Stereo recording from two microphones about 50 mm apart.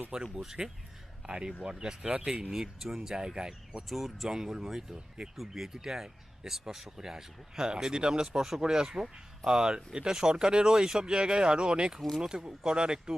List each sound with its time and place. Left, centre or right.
0.1 s speech: centre
3.8 s speech: centre